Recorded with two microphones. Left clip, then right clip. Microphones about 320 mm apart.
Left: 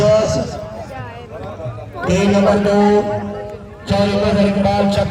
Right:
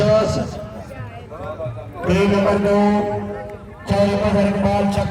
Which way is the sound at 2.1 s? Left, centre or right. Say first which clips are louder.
Left 3 dB; left.